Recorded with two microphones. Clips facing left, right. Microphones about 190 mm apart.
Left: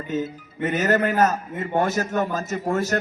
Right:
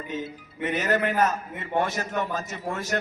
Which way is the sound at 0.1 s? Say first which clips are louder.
Left 9 dB; 45° left (ahead or behind).